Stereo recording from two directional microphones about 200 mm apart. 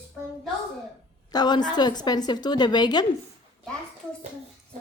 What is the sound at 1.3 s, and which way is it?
A woman's voice, 20° left (ahead or behind).